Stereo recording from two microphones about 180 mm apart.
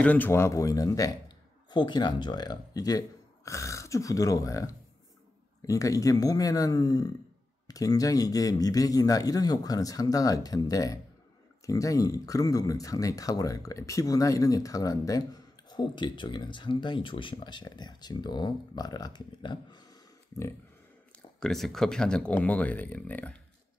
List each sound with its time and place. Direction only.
0.0 s speech: 10° left (ahead or behind)
21.4 s speech: centre (ahead or behind)